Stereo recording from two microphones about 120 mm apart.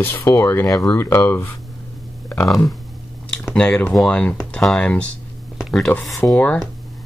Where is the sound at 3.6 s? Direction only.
10° left (ahead or behind).